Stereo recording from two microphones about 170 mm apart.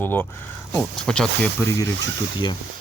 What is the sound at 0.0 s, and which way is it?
Speech, 10° left (ahead or behind).